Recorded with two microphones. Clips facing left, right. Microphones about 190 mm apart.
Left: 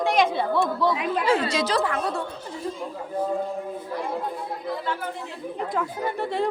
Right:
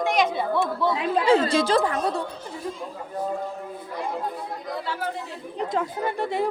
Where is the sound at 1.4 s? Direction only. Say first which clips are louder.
Right 3 dB; 50° right (ahead or behind).